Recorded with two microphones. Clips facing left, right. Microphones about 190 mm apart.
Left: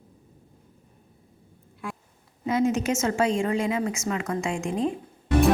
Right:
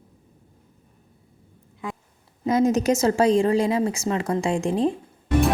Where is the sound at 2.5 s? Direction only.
40° right (ahead or behind).